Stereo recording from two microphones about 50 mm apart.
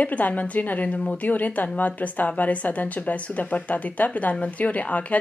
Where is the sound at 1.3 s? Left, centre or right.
Left.